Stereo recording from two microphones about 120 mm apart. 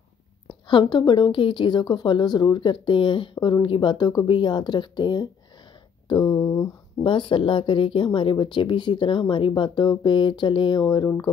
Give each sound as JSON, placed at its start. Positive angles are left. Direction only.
{"t": 0.5, "sound": "a woman's voice", "side_deg": 40}
{"t": 6.0, "sound": "a sound", "side_deg": 40}
{"t": 7.1, "sound": "speech", "side_deg": 45}